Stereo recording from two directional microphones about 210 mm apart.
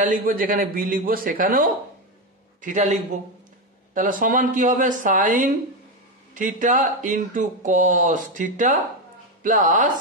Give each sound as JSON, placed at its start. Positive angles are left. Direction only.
{"t": 0.0, "sound": "speech", "side_deg": -40}